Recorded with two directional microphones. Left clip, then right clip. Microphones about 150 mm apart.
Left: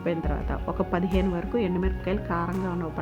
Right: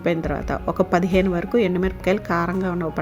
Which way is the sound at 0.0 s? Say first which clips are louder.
Right 6 dB; 40° right (ahead or behind).